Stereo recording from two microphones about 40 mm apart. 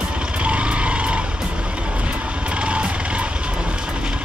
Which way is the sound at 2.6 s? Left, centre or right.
Right.